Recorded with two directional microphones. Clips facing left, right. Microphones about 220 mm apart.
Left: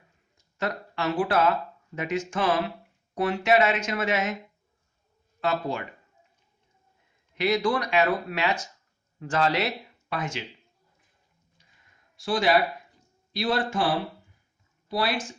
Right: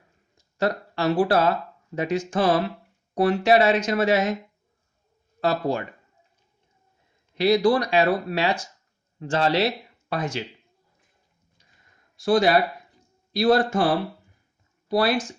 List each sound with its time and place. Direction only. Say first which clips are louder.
0.6 s speech: right 5 dB; 35° right (ahead or behind)
5.4 s speech: right 4 dB; 35° right (ahead or behind)
7.3 s speech: right 6 dB; 35° right (ahead or behind)
12.1 s speech: right 4 dB; 40° right (ahead or behind)
14.8 s speech: right 6 dB; 45° right (ahead or behind)